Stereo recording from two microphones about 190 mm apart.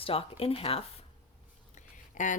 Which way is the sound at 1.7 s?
40° left (ahead or behind).